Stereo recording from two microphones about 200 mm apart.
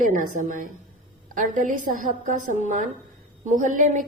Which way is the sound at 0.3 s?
40° right (ahead or behind).